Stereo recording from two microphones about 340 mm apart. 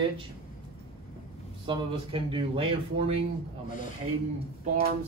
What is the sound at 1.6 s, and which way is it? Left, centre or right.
Speech, centre.